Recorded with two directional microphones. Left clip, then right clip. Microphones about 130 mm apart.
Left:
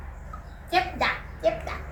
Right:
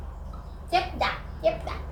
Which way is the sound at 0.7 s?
45° left (ahead or behind).